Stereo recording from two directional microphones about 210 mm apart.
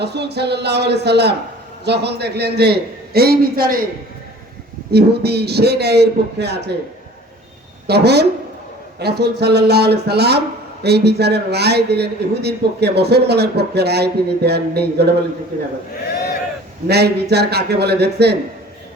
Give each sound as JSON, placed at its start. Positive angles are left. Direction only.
{"t": 0.0, "sound": "a man's voice", "side_deg": -50}
{"t": 4.9, "sound": "a man's voice", "side_deg": -50}
{"t": 7.9, "sound": "a man's voice", "side_deg": -50}
{"t": 16.8, "sound": "a man's voice", "side_deg": -50}